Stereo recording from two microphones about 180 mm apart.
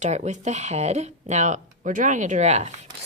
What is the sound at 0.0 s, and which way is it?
A woman's voice, 40° right (ahead or behind).